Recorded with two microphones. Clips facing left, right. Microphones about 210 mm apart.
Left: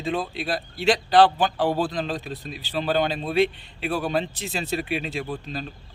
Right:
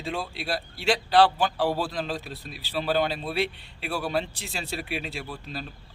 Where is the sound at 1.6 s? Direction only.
20° left (ahead or behind).